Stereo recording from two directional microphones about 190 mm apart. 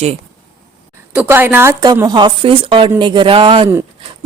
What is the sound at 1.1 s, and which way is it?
A woman's voice, 10° right (ahead or behind).